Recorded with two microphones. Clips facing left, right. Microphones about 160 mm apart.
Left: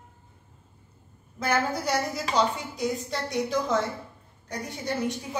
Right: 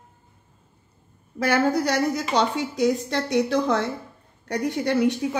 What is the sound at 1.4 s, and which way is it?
Speech, 75° right (ahead or behind).